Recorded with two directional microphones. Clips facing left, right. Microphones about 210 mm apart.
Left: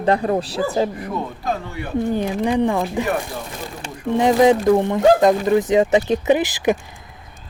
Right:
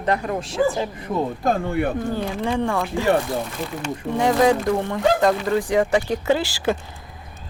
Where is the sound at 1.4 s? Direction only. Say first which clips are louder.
Right 5 dB; 50° right (ahead or behind).